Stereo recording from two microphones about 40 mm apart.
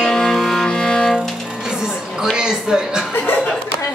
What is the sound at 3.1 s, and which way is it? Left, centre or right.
Chuckle, left.